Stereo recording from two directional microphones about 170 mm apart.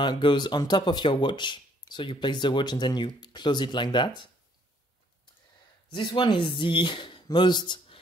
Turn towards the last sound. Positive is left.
turn(degrees=25)  # may be behind; listen again after turning